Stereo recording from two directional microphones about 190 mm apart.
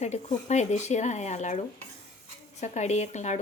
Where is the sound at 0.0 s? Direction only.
35° left (ahead or behind).